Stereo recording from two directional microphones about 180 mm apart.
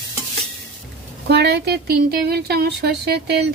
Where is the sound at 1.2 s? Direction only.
70° right (ahead or behind).